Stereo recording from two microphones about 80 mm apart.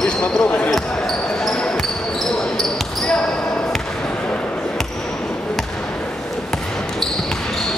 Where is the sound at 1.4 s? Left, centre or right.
Centre.